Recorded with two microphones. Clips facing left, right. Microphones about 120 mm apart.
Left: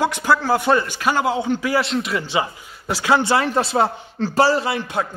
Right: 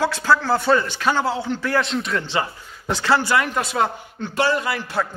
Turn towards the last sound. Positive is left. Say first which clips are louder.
# left 2 dB
turn(degrees=20)  # may be behind; listen again after turning